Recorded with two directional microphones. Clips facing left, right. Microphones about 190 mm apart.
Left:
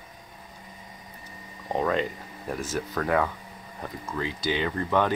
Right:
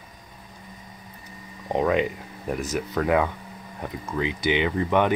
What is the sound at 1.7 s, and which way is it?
Speech, 15° right (ahead or behind).